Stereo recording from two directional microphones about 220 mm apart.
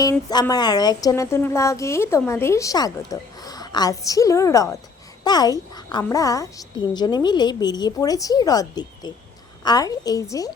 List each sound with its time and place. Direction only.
0.0 s speech: 15° left (ahead or behind)